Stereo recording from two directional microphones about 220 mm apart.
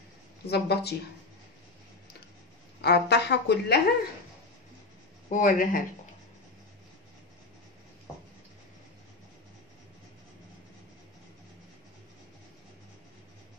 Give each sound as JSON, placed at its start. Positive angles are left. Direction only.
{"t": 0.5, "sound": "a woman's voice", "side_deg": 50}
{"t": 2.8, "sound": "a woman's voice", "side_deg": 50}
{"t": 5.3, "sound": "speech", "side_deg": 35}